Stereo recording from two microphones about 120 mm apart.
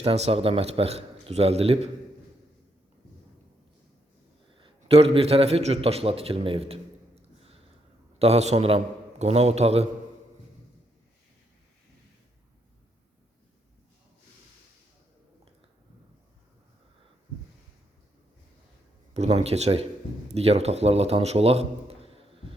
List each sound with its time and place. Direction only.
0.0 s a man's voice: 55° right (ahead or behind)
4.5 s a man's voice: 50° right (ahead or behind)
8.2 s a man's voice: 60° right (ahead or behind)
19.1 s a man's voice: 60° right (ahead or behind)